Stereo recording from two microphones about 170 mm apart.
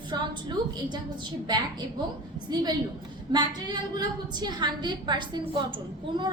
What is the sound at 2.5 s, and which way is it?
A woman's voice, 25° right (ahead or behind).